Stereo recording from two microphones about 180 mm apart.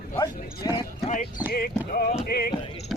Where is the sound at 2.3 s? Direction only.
60° left (ahead or behind).